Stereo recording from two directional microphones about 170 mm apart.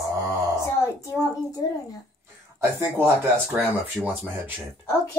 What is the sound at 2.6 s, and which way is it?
Speech, 15° right (ahead or behind).